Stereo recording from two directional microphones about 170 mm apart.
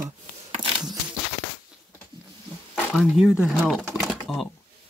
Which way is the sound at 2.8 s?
5° left (ahead or behind).